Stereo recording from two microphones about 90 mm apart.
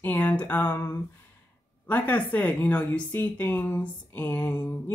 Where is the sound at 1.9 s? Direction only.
20° left (ahead or behind).